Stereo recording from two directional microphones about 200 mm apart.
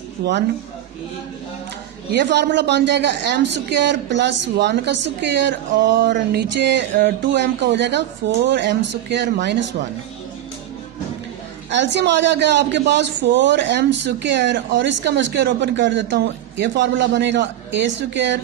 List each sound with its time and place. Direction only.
0.2 s a man's voice: 55° right (ahead or behind)
2.0 s a man's voice: 60° right (ahead or behind)
11.7 s a man's voice: 60° right (ahead or behind)